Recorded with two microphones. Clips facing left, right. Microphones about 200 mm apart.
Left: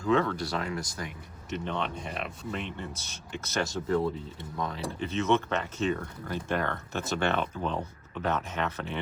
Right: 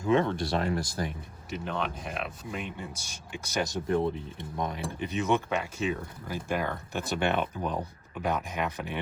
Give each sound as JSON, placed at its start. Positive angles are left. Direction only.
{"t": 0.0, "sound": "speech", "side_deg": -25}
{"t": 1.5, "sound": "speech", "side_deg": -5}